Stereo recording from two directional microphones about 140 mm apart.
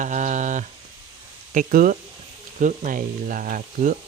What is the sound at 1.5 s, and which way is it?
Speech, 75° right (ahead or behind).